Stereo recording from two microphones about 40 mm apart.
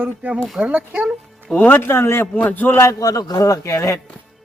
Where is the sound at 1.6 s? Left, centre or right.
Left.